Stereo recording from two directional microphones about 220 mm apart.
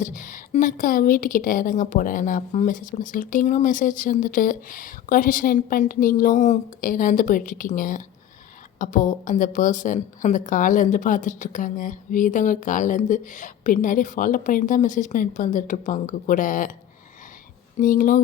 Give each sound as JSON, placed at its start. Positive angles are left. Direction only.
{"t": 0.0, "sound": "a woman's voice", "side_deg": 35}
{"t": 17.7, "sound": "a woman's voice", "side_deg": 40}